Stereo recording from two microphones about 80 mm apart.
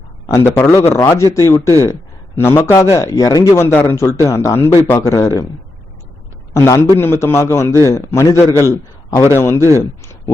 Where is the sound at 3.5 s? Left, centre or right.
Left.